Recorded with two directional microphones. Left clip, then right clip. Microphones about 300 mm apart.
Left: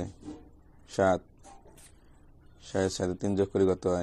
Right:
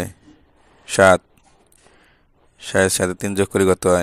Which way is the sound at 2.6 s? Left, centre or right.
Right.